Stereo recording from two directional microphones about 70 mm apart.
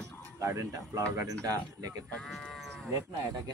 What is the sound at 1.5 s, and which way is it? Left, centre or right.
Speech, right.